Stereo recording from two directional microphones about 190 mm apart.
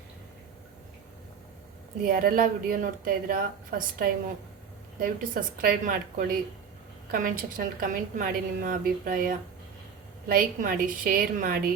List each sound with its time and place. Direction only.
2.0 s a woman's voice: 50° right (ahead or behind)